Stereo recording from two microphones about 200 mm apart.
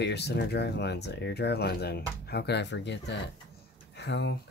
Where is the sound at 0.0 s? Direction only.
55° left (ahead or behind).